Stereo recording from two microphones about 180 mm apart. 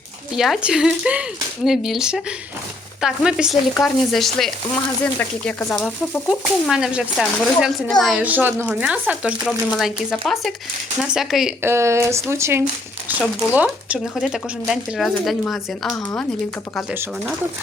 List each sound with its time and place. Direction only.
0.3 s speech: centre (ahead or behind)
11.6 s speech: 15° right (ahead or behind); by 16.2 s 5° left (ahead or behind)
16.9 s speech: 10° right (ahead or behind)